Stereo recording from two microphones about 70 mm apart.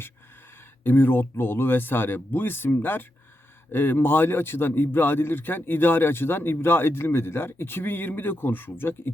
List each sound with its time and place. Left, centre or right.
0.9 s a man's voice: left